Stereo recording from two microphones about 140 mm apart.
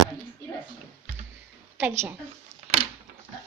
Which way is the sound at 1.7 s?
15° right (ahead or behind).